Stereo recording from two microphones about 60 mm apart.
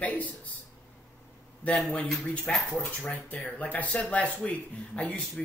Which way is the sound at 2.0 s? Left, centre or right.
Centre.